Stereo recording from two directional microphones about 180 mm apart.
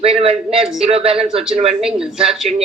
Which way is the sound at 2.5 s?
40° right (ahead or behind).